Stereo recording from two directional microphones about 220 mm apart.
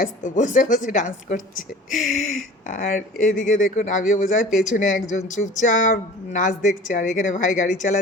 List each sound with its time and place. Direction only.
0.0 s speech: 35° left (ahead or behind)